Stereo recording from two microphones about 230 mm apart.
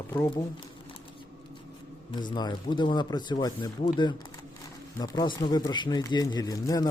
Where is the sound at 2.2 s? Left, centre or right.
Centre.